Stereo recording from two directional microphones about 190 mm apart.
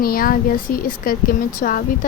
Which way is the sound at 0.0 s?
50° left (ahead or behind).